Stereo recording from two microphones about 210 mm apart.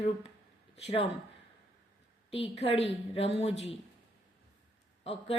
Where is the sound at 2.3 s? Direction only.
30° left (ahead or behind).